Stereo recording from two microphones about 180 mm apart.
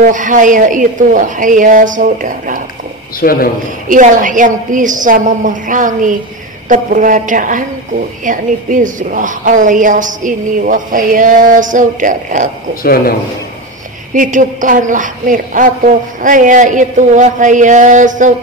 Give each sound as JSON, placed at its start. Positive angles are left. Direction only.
{"t": 0.0, "sound": "a woman's voice", "side_deg": -45}
{"t": 3.2, "sound": "a man's voice", "side_deg": 55}
{"t": 3.9, "sound": "a woman's voice", "side_deg": -45}
{"t": 12.8, "sound": "a man's voice", "side_deg": 55}
{"t": 14.1, "sound": "a woman's voice", "side_deg": -45}